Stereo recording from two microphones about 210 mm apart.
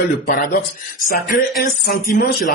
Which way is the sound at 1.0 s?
40° left (ahead or behind).